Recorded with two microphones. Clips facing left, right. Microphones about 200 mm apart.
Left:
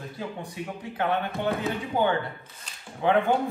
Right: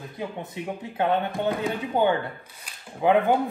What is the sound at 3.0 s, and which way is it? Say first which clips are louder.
Speech: right 3 dB; 15° right (ahead or behind).